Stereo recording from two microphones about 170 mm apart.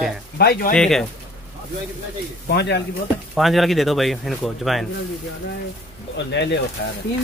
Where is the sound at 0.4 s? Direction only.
65° left (ahead or behind).